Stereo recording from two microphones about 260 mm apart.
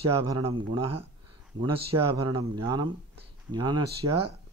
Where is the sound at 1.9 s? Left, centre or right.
Centre.